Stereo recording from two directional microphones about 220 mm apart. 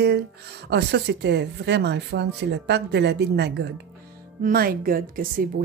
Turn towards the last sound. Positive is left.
turn(degrees=-40)  # may be behind; listen again after turning